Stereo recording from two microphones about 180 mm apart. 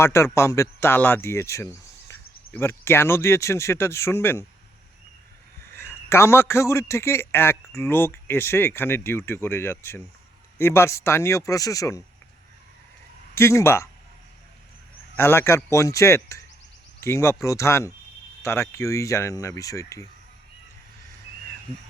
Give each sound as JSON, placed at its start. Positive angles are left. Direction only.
{"t": 0.0, "sound": "speech", "side_deg": 15}
{"t": 5.7, "sound": "a man's voice", "side_deg": 15}
{"t": 13.3, "sound": "speech", "side_deg": 15}
{"t": 15.1, "sound": "speech", "side_deg": 15}